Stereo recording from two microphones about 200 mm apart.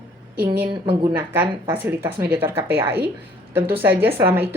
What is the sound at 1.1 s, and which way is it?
Speech, 10° right (ahead or behind).